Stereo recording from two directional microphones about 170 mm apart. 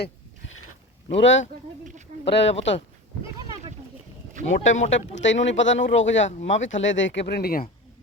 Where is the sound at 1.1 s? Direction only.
90° left.